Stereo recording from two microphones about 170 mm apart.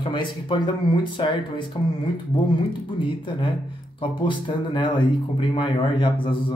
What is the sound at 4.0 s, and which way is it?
Speech, 30° left (ahead or behind).